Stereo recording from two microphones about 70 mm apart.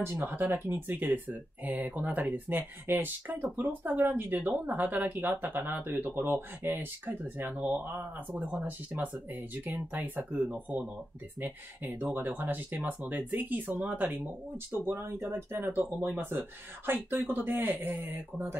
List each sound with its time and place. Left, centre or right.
0.0 s speech: right
14.7 s speech: right